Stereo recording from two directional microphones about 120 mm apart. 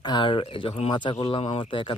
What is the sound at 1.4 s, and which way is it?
Speech, 55° left (ahead or behind).